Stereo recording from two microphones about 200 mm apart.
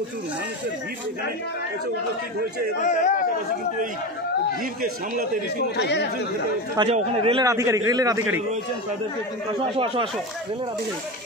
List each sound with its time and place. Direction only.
2.8 s a man's voice: 40° left (ahead or behind)
5.8 s speech: 60° left (ahead or behind)
6.8 s speech: 30° right (ahead or behind)
7.4 s a man's voice: 15° right (ahead or behind)
9.5 s speech: 25° right (ahead or behind)